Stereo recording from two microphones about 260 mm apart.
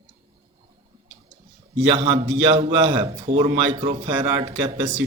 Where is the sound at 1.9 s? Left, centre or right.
Right.